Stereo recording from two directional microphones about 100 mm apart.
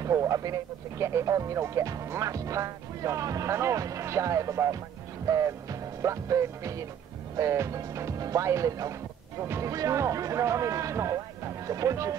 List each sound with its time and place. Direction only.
0.0 s speech: 35° right (ahead or behind)
5.2 s music: 35° right (ahead or behind)
7.3 s speech: 30° right (ahead or behind)